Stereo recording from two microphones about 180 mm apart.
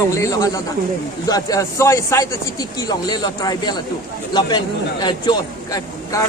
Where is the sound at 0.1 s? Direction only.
15° left (ahead or behind).